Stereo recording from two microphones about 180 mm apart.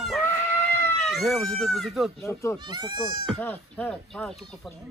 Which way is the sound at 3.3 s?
10° left (ahead or behind).